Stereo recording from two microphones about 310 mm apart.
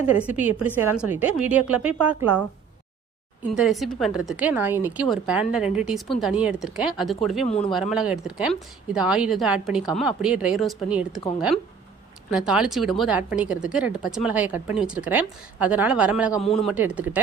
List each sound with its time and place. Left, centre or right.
0.1 s speech: centre
3.5 s speech: centre
16.3 s a man's voice: centre
16.6 s speech: centre